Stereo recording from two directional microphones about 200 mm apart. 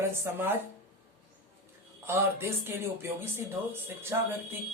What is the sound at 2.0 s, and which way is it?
Speech, 10° right (ahead or behind).